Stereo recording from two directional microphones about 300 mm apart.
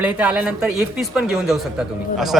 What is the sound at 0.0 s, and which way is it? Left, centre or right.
A man's voice, centre.